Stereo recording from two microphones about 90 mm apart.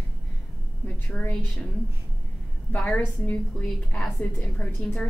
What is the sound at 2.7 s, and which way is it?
A woman's voice, 15° left (ahead or behind).